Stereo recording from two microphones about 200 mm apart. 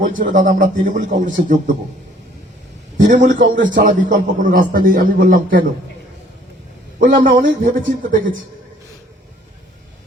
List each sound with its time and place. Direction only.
0.0 s a man's voice: 40° right (ahead or behind)
3.1 s a man's voice: 40° right (ahead or behind)
3.6 s a man's voice: 65° right (ahead or behind)
3.8 s a man's voice: 40° right (ahead or behind)
7.0 s a man's voice: 45° right (ahead or behind)